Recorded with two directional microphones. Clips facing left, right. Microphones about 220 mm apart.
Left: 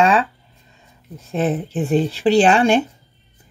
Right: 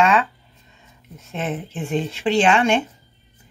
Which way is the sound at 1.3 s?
35° left (ahead or behind).